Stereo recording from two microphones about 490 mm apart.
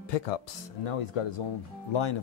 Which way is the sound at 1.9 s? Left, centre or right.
Left.